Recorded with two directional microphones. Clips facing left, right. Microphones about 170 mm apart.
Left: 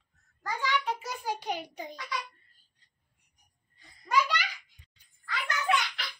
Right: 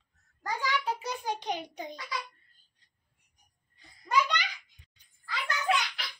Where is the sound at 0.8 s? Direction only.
5° left (ahead or behind).